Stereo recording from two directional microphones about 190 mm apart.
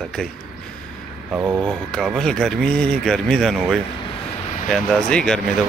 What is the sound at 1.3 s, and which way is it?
Speech, 10° right (ahead or behind).